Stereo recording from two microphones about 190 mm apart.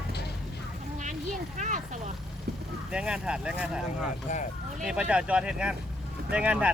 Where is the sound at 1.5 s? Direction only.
40° right (ahead or behind).